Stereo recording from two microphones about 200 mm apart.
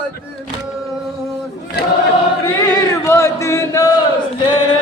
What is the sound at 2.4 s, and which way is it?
Chant, 15° left (ahead or behind).